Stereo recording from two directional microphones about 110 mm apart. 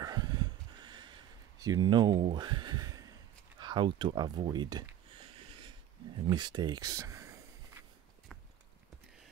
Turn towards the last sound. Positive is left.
turn(degrees=-25)  # may be behind; listen again after turning